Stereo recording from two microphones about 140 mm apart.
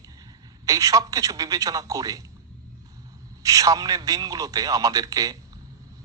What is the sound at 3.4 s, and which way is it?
A man's voice, 25° right (ahead or behind).